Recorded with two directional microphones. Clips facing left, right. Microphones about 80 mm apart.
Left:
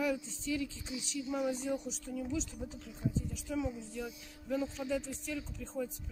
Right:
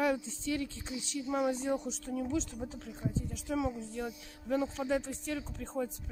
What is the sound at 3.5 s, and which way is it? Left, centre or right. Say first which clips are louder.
Speech: right 4 dB; right.